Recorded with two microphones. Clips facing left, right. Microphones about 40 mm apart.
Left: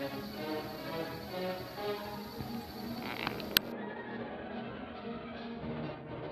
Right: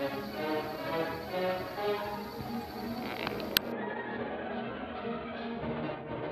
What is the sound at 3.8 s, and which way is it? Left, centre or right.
Music, right.